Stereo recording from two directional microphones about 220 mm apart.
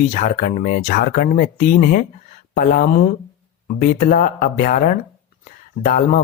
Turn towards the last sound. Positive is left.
turn(degrees=35)  # may be behind; listen again after turning